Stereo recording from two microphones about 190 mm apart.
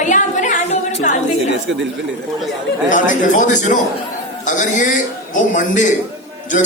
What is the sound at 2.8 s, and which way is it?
A man's voice, 40° left (ahead or behind).